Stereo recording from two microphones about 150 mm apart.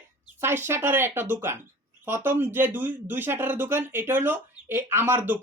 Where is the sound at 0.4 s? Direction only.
15° right (ahead or behind).